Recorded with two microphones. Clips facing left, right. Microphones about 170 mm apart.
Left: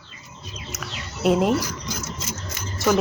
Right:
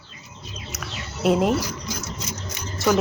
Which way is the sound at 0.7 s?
Centre (ahead or behind).